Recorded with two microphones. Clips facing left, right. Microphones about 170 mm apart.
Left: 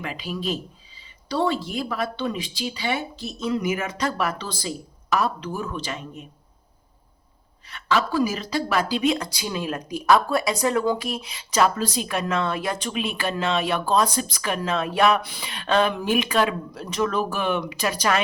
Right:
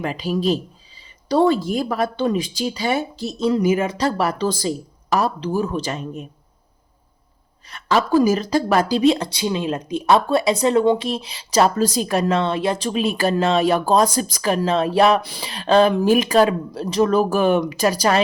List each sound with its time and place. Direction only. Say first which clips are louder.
0.0 s speech: right 8 dB; 40° right (ahead or behind)
7.7 s speech: right 6 dB; 40° right (ahead or behind)